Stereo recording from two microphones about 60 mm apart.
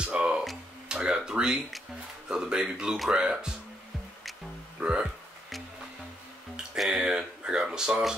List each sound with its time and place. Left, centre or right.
0.0 s a sound: centre
0.8 s speech: centre
4.7 s speech: centre
6.8 s speech: centre